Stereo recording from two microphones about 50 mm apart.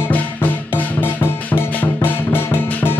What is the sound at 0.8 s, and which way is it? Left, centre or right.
Music, left.